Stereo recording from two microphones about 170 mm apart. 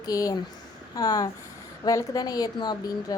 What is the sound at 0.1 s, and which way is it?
A woman's voice, 20° left (ahead or behind).